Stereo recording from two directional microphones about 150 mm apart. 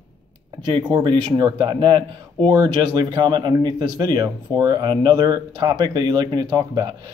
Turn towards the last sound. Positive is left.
turn(degrees=-25)  # may be behind; listen again after turning